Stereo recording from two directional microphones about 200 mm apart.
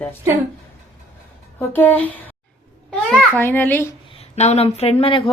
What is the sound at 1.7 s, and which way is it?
A child's voice, 10° left (ahead or behind).